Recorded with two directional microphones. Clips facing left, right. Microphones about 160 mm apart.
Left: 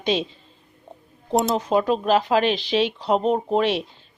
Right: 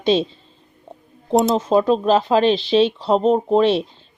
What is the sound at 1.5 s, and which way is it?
Speech, 25° right (ahead or behind).